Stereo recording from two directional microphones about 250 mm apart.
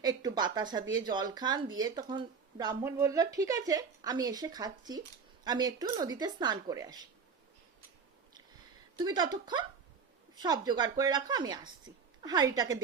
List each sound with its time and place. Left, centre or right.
0.0 s speech: centre
9.0 s speech: centre